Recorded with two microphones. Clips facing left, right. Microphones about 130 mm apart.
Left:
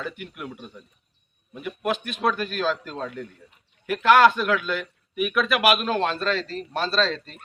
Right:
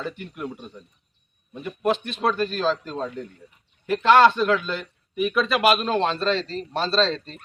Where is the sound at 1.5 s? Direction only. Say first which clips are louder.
Right 3 dB; 30° right (ahead or behind).